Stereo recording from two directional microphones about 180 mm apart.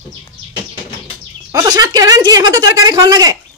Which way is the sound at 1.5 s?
20° right (ahead or behind).